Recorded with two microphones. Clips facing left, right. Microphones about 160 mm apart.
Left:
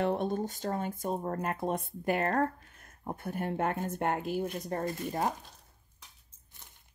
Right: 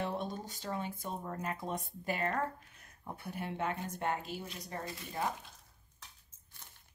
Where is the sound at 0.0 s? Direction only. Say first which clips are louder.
Left 8 dB; 55° left (ahead or behind).